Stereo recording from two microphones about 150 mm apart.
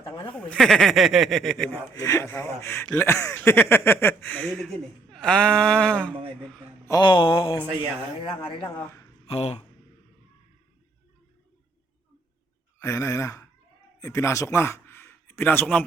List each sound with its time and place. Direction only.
0.0 s a sound: 35° left (ahead or behind)
0.3 s speech: 5° left (ahead or behind)
2.0 s speech: 20° left (ahead or behind)
2.8 s speech: 5° left (ahead or behind)
3.1 s speech: 20° left (ahead or behind)
7.0 s mantra: 35° left (ahead or behind)
9.2 s speech: 40° left (ahead or behind)
12.8 s speech: 20° left (ahead or behind)